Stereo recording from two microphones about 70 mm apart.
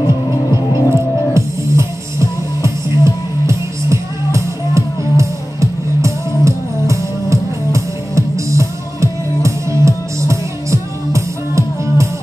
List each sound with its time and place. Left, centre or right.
0.9 s music: right